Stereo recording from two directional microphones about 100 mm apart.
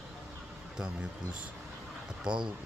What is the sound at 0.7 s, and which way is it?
Speech, 5° right (ahead or behind).